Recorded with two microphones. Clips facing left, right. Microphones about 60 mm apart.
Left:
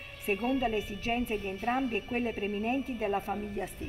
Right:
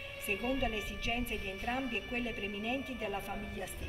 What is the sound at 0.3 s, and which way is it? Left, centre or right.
A woman's voice, left.